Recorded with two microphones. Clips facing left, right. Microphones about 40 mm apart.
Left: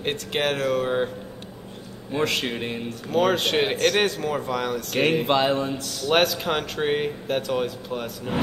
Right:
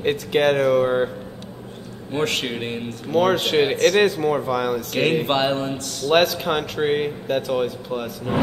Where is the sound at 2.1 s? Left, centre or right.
Centre.